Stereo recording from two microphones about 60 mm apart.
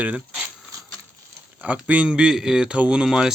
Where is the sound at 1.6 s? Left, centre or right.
Right.